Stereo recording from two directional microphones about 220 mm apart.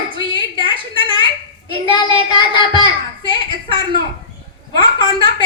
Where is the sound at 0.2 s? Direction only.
20° left (ahead or behind).